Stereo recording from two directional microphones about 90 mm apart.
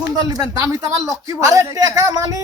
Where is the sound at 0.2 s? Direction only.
40° right (ahead or behind).